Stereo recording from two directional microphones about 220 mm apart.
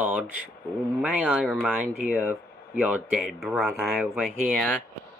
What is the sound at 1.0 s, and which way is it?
Speech, 5° right (ahead or behind).